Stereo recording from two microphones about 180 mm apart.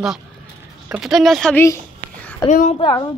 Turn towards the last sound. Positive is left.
turn(degrees=25)  # may be behind; listen again after turning